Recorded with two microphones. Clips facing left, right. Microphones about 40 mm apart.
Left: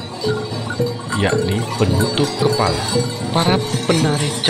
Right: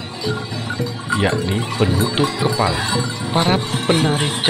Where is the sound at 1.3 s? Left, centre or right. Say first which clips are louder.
Left 1 dB; centre.